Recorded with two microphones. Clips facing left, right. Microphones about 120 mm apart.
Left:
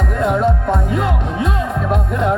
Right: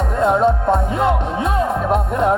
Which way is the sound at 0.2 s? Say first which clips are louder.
Right 2 dB; 30° right (ahead or behind).